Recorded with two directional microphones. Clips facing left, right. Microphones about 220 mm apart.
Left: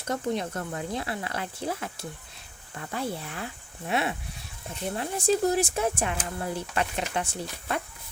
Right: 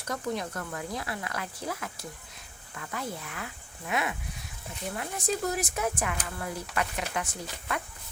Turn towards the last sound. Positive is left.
turn(degrees=30)  # may be behind; listen again after turning